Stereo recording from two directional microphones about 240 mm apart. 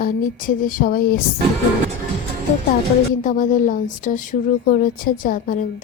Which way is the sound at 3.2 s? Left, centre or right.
Left.